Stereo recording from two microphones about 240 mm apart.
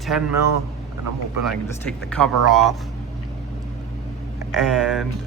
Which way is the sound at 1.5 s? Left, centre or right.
Centre.